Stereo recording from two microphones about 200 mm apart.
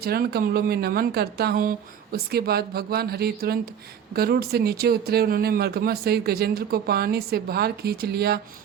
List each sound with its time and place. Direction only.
0.0 s speech: 50° right (ahead or behind)